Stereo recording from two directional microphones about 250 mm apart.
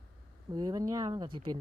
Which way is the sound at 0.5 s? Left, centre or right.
Centre.